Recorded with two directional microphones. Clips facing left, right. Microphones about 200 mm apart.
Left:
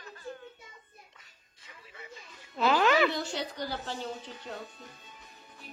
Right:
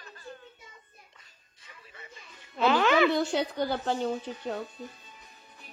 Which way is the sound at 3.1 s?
55° right (ahead or behind).